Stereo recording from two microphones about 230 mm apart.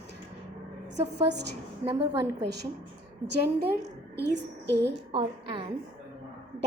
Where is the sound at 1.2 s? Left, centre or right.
Right.